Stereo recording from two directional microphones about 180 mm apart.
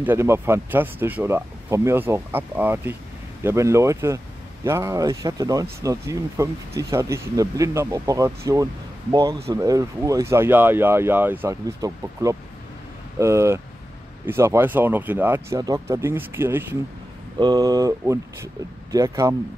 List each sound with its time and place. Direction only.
0.0 s speech: 15° right (ahead or behind)